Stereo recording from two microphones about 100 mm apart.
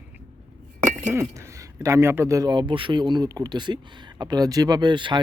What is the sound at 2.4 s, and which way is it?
Speech, 50° right (ahead or behind).